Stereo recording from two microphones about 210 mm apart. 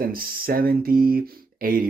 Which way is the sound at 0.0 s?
45° right (ahead or behind).